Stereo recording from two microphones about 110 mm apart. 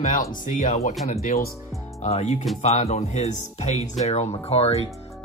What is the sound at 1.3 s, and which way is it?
Speech, 75° left (ahead or behind).